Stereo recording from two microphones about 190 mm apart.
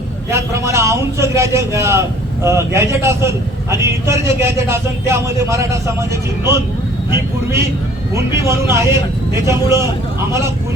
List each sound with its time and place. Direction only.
0.3 s a man's voice: 15° right (ahead or behind)
8.1 s a man's voice: 15° right (ahead or behind)